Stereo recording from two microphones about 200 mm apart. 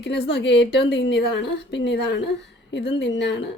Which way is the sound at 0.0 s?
60° left (ahead or behind).